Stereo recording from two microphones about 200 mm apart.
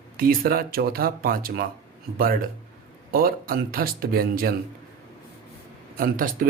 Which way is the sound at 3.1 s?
50° right (ahead or behind).